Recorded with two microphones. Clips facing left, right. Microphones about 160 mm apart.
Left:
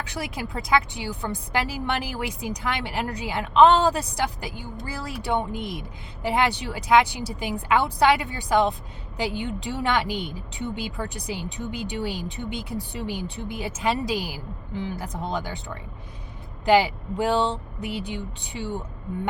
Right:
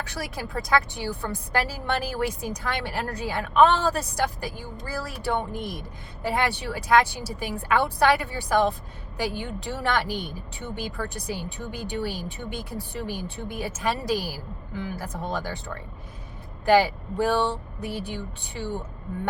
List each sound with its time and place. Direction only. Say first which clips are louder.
0.1 s a woman's voice: left 1 dB; 15° left (ahead or behind)
16.6 s a woman's voice: even; 15° left (ahead or behind)